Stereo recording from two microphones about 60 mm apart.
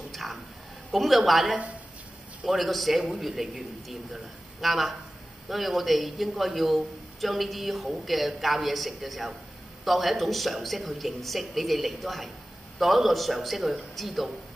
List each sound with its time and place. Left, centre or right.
0.1 s a sound: centre
0.9 s speech: centre
1.4 s speech: centre
2.4 s speech: centre